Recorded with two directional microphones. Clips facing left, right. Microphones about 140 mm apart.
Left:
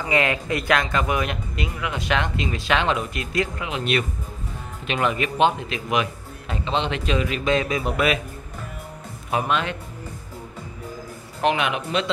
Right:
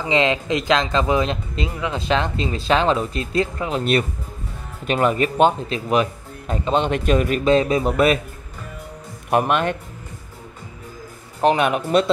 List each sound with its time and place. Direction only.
0.0 s speech: 20° right (ahead or behind); by 7.4 s 50° right (ahead or behind)
7.4 s speech: 35° right (ahead or behind)
9.3 s speech: 55° right (ahead or behind)
11.4 s speech: 40° right (ahead or behind)